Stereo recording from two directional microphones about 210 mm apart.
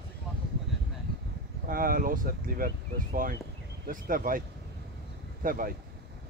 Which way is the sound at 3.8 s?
40° right (ahead or behind).